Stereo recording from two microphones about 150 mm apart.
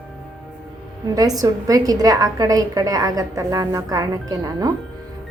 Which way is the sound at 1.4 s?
25° right (ahead or behind).